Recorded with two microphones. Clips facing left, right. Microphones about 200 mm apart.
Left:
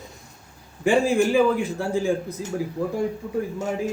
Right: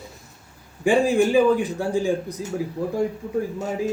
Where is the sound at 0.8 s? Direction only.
15° right (ahead or behind).